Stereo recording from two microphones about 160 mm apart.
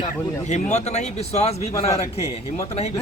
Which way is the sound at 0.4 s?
45° left (ahead or behind).